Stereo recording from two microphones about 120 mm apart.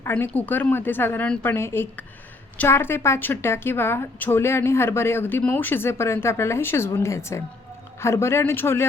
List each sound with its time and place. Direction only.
0.0 s a woman's voice: 15° left (ahead or behind)